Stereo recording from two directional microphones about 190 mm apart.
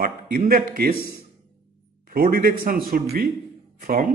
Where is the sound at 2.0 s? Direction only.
50° right (ahead or behind).